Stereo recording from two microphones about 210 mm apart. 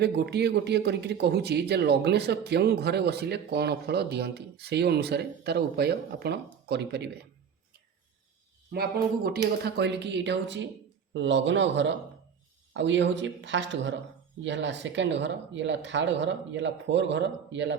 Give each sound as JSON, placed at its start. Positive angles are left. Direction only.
{"t": 0.0, "sound": "speech", "side_deg": -50}
{"t": 8.7, "sound": "speech", "side_deg": -45}